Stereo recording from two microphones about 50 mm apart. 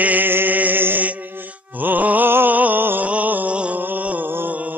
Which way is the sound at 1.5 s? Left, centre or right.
Right.